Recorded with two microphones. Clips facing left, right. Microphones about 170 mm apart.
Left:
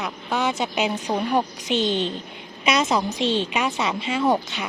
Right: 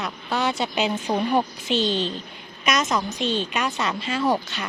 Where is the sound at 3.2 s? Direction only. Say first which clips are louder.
Left 2 dB; 90° left.